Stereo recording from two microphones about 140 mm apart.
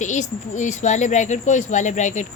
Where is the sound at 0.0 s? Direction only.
60° left (ahead or behind).